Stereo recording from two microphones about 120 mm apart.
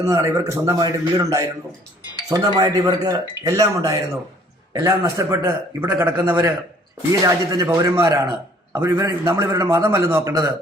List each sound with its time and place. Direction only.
0.2 s a man's voice: 25° right (ahead or behind)